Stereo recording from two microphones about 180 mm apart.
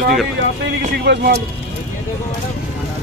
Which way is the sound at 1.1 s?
75° right (ahead or behind).